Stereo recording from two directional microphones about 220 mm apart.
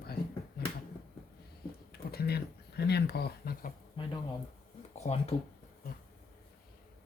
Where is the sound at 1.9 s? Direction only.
45° left (ahead or behind).